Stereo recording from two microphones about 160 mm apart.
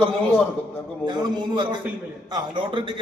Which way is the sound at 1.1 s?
25° right (ahead or behind).